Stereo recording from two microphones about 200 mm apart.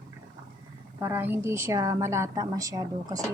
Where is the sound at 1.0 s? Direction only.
10° right (ahead or behind).